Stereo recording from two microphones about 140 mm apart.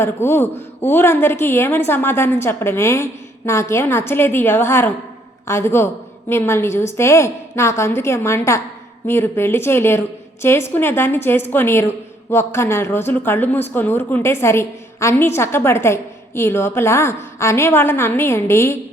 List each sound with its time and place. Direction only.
0.0 s a woman's voice: 15° left (ahead or behind)